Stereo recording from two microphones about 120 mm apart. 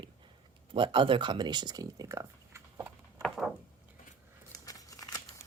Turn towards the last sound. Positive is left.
turn(degrees=30)  # may be behind; listen again after turning